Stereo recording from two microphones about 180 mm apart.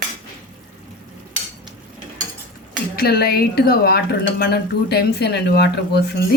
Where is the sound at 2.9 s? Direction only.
60° left (ahead or behind).